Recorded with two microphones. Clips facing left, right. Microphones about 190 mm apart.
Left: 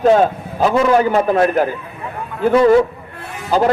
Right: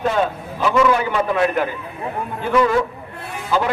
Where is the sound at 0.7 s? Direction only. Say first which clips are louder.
Left 3 dB; 40° left (ahead or behind).